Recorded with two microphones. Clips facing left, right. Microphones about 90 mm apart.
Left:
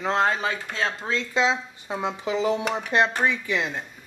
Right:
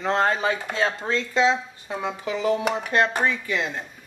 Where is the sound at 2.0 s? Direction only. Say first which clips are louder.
Left 2 dB; 20° left (ahead or behind).